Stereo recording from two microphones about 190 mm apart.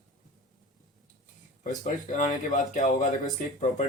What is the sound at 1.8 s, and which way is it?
Speech, 45° left (ahead or behind).